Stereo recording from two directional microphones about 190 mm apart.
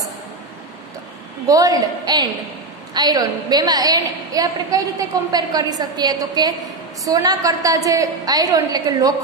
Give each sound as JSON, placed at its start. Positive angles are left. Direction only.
{"t": 1.5, "sound": "a woman's voice", "side_deg": -20}